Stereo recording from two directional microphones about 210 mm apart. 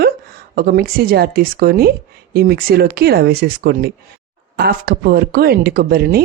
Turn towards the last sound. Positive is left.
turn(degrees=-45)  # may be behind; listen again after turning